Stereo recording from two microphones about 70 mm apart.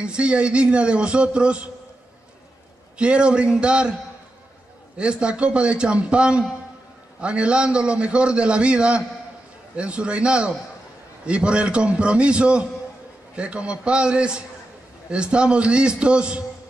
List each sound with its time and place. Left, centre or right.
0.0 s a man's voice: centre
3.0 s a man's voice: centre
4.9 s a man's voice: centre